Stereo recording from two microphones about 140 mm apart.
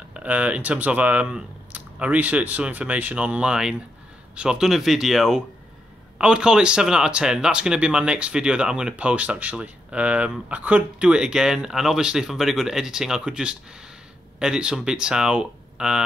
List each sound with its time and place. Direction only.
0.1 s speech: 10° right (ahead or behind)